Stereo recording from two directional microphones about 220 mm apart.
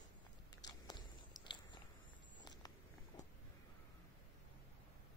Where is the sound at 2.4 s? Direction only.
15° left (ahead or behind).